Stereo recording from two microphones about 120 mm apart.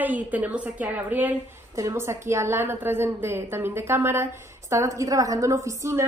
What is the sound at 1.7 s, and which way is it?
A woman's voice, 25° right (ahead or behind).